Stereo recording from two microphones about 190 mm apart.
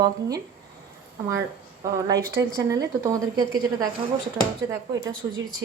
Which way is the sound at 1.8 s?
20° right (ahead or behind).